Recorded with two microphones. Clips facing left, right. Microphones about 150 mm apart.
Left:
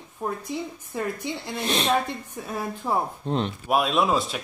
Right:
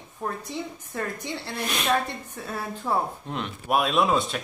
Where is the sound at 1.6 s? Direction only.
30° left (ahead or behind).